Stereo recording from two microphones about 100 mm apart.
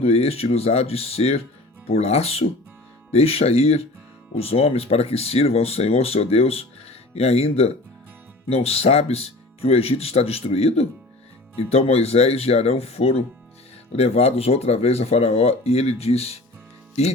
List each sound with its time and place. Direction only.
0.0 s speech: 90° left